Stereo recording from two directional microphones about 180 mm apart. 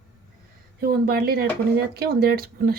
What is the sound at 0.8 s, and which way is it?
A woman's voice, 55° right (ahead or behind).